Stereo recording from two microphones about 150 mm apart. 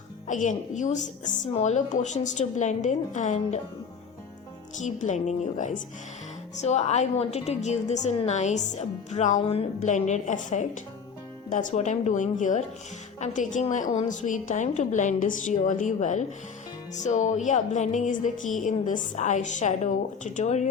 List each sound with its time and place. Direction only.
0.3 s a woman's voice: 55° left (ahead or behind)
4.8 s a woman's voice: 55° left (ahead or behind)